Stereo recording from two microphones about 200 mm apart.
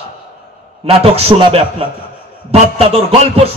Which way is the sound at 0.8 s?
30° right (ahead or behind).